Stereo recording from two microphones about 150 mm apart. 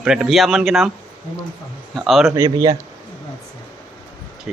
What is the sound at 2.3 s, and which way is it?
Speech, 25° right (ahead or behind).